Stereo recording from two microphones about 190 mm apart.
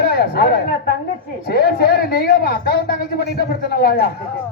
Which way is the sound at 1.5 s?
55° left (ahead or behind).